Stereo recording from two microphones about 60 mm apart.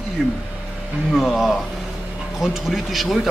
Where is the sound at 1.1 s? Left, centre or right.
Centre.